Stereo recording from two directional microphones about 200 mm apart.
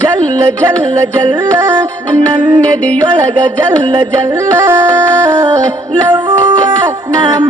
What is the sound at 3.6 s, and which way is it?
Music, 15° right (ahead or behind).